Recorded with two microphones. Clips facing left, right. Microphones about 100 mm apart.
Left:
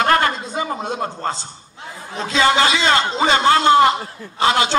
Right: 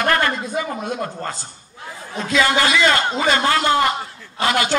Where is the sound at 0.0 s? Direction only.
25° left (ahead or behind).